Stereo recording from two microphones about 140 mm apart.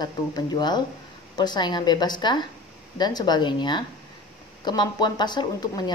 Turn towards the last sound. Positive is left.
turn(degrees=30)  # may be behind; listen again after turning